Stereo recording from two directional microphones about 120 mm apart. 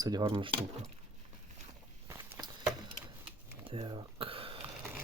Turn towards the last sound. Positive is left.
turn(degrees=-50)  # may be behind; listen again after turning